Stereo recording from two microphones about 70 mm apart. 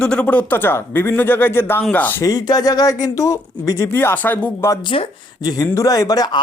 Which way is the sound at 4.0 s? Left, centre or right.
Left.